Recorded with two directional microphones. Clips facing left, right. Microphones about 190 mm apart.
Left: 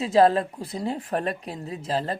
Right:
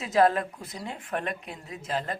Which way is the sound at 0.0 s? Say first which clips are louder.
Left 4 dB; 30° left (ahead or behind).